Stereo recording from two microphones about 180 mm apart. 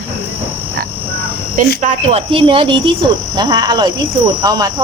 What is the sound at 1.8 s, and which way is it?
Speech, 35° right (ahead or behind).